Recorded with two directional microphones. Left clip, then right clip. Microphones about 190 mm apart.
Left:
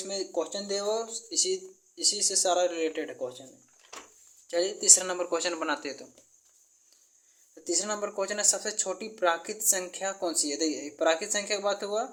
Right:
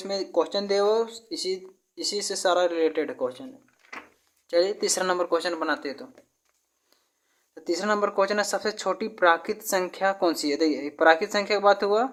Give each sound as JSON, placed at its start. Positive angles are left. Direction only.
{"t": 0.0, "sound": "speech", "side_deg": -30}
{"t": 4.4, "sound": "speech", "side_deg": -30}
{"t": 7.5, "sound": "speech", "side_deg": -30}